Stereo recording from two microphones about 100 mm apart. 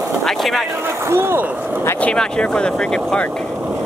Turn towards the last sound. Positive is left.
turn(degrees=10)  # may be behind; listen again after turning